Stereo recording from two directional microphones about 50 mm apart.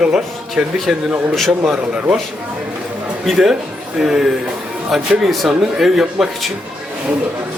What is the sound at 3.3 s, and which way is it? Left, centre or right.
Speech, centre.